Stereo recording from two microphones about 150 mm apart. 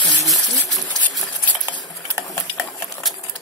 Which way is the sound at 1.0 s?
Centre (ahead or behind).